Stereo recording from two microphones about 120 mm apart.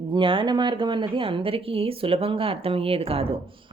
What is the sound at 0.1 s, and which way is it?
A woman's voice, 45° right (ahead or behind).